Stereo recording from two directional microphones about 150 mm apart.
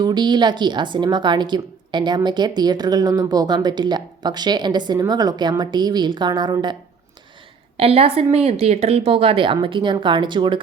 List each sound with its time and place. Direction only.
0.0 s speech: 30° right (ahead or behind)
7.8 s speech: 40° right (ahead or behind)